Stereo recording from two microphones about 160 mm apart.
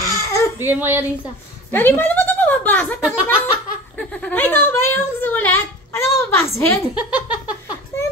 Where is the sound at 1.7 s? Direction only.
15° left (ahead or behind).